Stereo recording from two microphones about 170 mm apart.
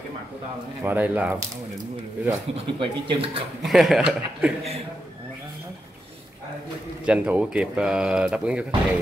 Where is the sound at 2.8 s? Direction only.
30° right (ahead or behind).